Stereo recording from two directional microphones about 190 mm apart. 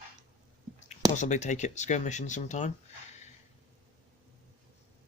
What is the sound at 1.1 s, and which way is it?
Speech, 40° left (ahead or behind).